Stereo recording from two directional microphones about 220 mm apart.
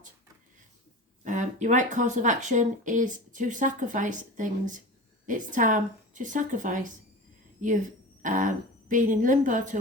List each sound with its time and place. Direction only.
1.2 s speech: 35° right (ahead or behind)